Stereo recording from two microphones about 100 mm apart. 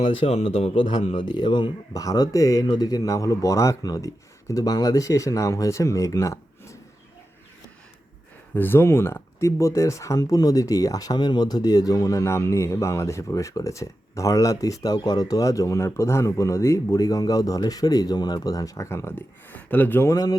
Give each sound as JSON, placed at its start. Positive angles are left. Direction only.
{"t": 0.1, "sound": "speech", "side_deg": 80}
{"t": 1.2, "sound": "speech", "side_deg": 50}
{"t": 1.9, "sound": "speech", "side_deg": 35}
{"t": 8.5, "sound": "speech", "side_deg": 20}